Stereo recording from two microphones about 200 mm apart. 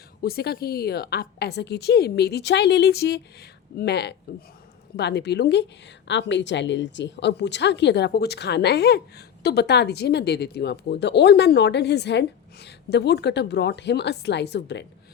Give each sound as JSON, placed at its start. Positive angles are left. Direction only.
{"t": 0.2, "sound": "a woman's voice", "side_deg": 50}